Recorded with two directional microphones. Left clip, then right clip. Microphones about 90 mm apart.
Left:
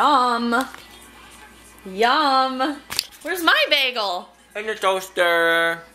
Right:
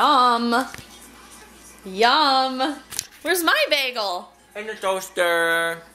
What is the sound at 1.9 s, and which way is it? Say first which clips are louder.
A woman's voice: even; 15° right (ahead or behind).